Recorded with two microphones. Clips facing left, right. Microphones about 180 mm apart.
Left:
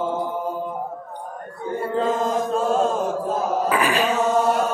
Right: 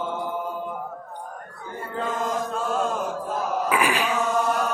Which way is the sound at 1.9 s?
30° left (ahead or behind).